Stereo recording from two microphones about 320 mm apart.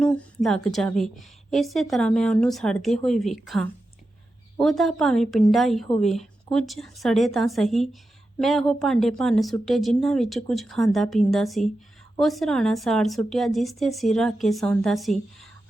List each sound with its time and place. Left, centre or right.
0.0 s a woman's voice: centre